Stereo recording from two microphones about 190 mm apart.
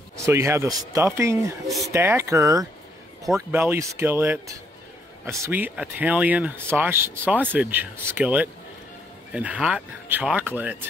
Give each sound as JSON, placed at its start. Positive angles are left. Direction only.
{"t": 0.2, "sound": "speech", "side_deg": -15}